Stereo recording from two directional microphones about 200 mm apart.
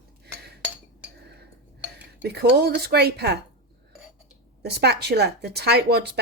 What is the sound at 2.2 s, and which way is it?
Speech, 55° right (ahead or behind).